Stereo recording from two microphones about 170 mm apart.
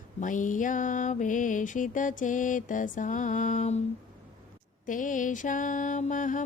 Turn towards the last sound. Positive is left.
turn(degrees=50)  # may be behind; listen again after turning